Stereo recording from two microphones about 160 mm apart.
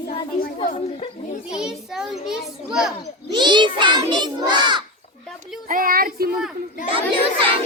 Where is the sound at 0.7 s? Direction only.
40° left (ahead or behind).